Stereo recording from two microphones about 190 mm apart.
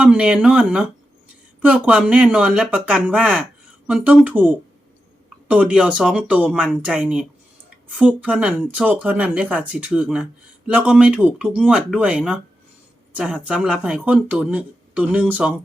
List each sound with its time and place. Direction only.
0.0 s speech: 5° right (ahead or behind)